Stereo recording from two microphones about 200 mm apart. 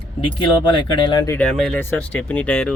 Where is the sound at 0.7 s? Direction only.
20° left (ahead or behind).